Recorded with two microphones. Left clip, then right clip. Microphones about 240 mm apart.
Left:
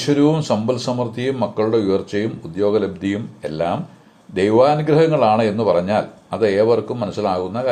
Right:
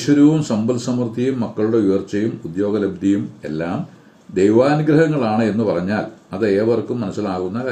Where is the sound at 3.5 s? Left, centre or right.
Left.